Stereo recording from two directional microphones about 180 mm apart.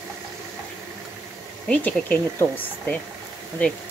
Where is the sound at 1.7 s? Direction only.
10° left (ahead or behind).